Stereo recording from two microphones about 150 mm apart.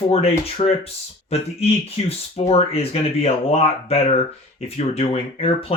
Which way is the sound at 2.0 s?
40° left (ahead or behind).